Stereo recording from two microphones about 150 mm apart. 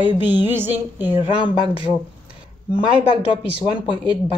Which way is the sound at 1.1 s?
35° left (ahead or behind).